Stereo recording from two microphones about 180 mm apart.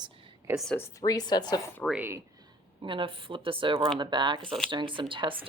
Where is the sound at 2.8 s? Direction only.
30° right (ahead or behind).